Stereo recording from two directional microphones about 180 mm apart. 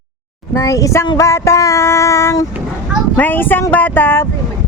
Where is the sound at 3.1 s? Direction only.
10° left (ahead or behind).